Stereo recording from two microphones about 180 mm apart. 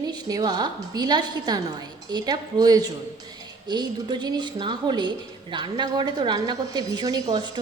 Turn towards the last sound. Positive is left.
turn(degrees=-20)  # may be behind; listen again after turning